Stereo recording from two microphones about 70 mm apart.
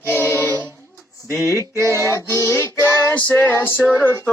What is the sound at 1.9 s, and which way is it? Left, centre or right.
Female singing, left.